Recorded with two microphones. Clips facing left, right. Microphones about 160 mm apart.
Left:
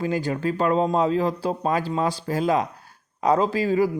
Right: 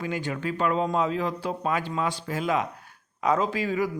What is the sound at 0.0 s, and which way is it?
A man's voice, 35° left (ahead or behind).